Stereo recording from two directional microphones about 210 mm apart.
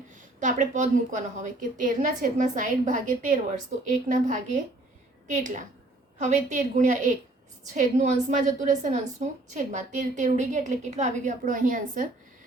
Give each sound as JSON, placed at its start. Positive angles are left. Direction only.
{"t": 0.1, "sound": "a woman's voice", "side_deg": -35}